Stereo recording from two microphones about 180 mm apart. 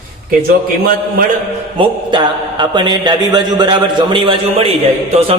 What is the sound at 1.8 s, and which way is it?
A man's voice, 25° right (ahead or behind).